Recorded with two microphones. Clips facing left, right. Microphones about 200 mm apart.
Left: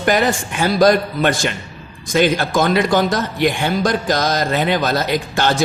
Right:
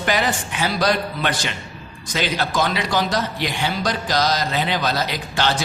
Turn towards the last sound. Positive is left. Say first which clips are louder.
# left 4 dB
turn(degrees=50)  # may be behind; listen again after turning